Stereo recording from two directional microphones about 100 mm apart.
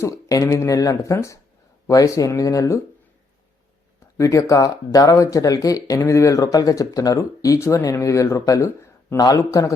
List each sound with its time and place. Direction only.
0.0 s speech: 35° left (ahead or behind)
4.2 s speech: 30° left (ahead or behind)